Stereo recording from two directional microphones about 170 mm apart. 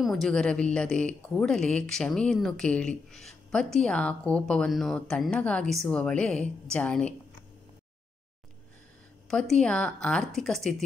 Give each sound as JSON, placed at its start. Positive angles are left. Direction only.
{"t": 0.0, "sound": "a woman's voice", "side_deg": 0}
{"t": 9.3, "sound": "a woman's voice", "side_deg": 5}